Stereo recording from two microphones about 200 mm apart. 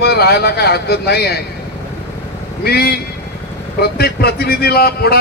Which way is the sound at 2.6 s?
50° left (ahead or behind).